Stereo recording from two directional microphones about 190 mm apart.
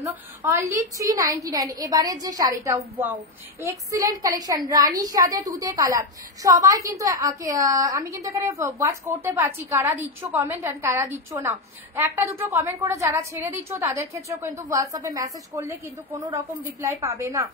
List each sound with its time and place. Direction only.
0.0 s a woman's voice: 15° right (ahead or behind)